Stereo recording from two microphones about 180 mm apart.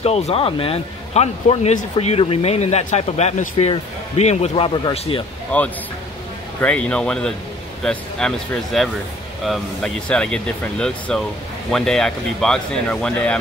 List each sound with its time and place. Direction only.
0.0 s speech: 35° left (ahead or behind)
5.5 s speech: 10° left (ahead or behind)